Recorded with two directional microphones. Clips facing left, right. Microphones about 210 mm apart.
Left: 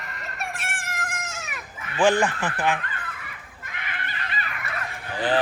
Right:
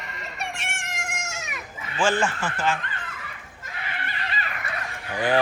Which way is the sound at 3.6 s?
30° right (ahead or behind).